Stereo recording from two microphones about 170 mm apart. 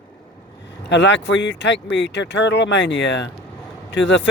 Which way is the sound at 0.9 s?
90° left.